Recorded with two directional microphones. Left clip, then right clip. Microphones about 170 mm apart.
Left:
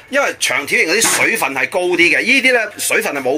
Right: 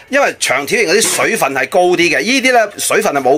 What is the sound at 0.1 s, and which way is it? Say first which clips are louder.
Speech: right 3 dB; 55° right (ahead or behind).